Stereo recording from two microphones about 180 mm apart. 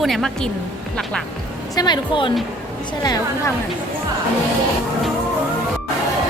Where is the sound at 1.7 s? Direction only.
20° left (ahead or behind).